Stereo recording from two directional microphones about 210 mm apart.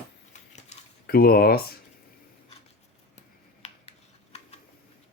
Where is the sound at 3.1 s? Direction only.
30° left (ahead or behind).